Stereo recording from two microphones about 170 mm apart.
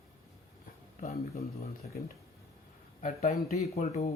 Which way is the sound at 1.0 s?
40° left (ahead or behind).